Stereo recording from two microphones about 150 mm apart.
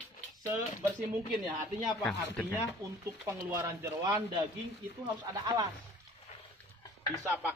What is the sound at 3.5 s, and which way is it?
Speech, 15° right (ahead or behind).